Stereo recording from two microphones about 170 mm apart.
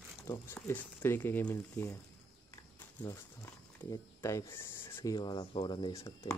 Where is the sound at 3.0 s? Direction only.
15° left (ahead or behind).